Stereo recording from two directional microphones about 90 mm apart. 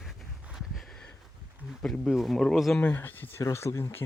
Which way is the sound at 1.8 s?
5° left (ahead or behind).